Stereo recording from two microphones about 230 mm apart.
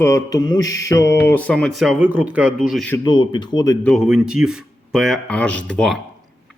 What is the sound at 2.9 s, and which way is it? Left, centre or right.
Speech, centre.